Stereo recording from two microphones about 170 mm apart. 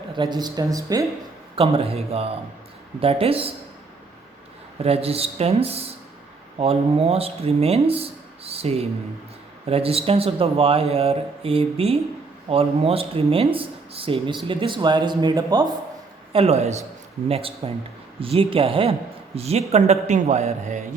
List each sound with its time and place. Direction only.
0.2 s speech: 25° right (ahead or behind)
1.5 s speech: 35° right (ahead or behind)
4.8 s speech: 35° right (ahead or behind)
16.3 s speech: 35° right (ahead or behind)